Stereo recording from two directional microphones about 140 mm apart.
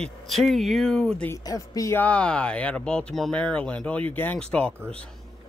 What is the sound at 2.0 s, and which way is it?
Speech, 10° left (ahead or behind).